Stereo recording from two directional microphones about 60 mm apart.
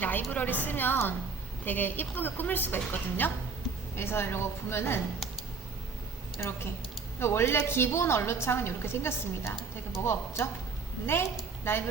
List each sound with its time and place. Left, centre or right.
0.0 s a woman's voice: left
6.3 s a woman's voice: left